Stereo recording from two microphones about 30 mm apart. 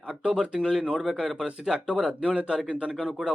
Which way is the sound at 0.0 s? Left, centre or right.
Right.